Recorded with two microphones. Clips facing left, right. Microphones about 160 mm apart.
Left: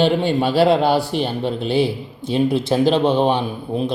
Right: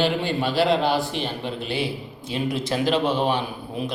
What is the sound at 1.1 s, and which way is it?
Speech, 45° left (ahead or behind).